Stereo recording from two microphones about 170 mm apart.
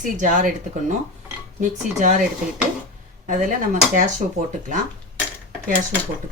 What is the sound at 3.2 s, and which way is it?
Speech, 50° right (ahead or behind).